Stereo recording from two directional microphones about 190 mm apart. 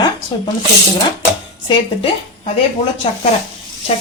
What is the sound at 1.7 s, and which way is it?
Speech, 30° left (ahead or behind).